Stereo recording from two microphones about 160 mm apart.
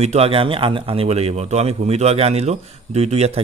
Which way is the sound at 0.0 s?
40° right (ahead or behind).